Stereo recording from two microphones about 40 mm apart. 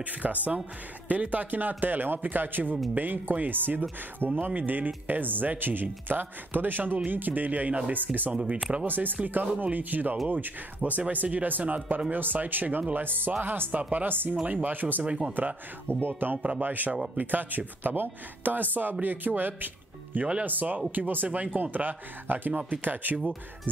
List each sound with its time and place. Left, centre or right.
0.0 s speech: right
4.2 s speech: left
4.6 s speech: right
13.9 s speech: right
14.4 s speech: right
16.9 s speech: right
17.2 s speech: right